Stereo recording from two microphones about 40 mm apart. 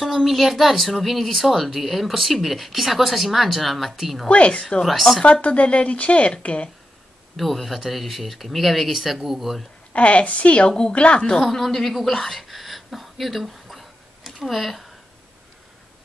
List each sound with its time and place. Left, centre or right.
0.0 s speech: centre
4.3 s a woman's voice: left
7.3 s speech: centre
9.9 s a woman's voice: left
11.4 s a sound: centre